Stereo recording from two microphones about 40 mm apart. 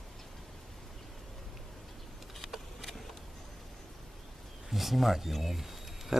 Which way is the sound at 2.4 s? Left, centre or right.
Centre.